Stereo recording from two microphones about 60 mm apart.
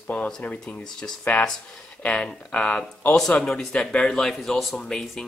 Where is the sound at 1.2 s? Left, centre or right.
Left.